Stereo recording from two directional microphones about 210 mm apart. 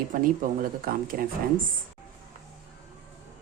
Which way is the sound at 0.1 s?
40° right (ahead or behind).